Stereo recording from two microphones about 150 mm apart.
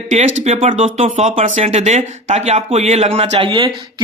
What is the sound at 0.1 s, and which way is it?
Speech, 45° right (ahead or behind).